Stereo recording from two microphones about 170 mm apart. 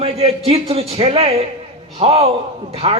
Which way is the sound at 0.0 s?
35° right (ahead or behind).